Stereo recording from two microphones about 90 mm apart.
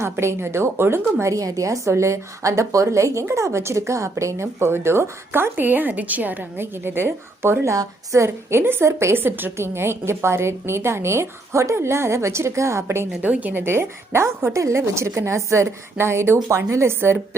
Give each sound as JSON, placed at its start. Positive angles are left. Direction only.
{"t": 0.0, "sound": "a woman's voice", "side_deg": -30}
{"t": 13.2, "sound": "a woman's voice", "side_deg": -15}